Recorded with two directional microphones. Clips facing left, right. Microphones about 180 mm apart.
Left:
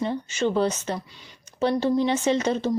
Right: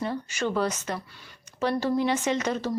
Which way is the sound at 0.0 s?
25° left (ahead or behind).